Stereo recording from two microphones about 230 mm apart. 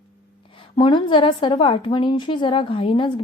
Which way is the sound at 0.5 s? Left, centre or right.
Left.